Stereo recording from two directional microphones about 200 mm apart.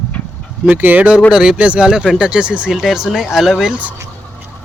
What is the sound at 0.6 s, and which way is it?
Speech, 10° right (ahead or behind).